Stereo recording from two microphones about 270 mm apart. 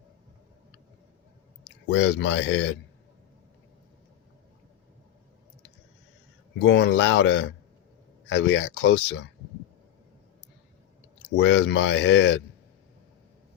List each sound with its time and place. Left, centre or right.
1.6 s speech: left
6.6 s speech: left
11.2 s speech: left